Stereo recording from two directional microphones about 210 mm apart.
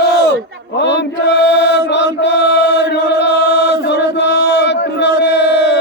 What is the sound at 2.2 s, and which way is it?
Chant, 55° left (ahead or behind).